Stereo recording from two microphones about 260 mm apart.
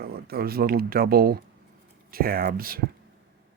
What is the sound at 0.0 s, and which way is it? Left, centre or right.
Speech, right.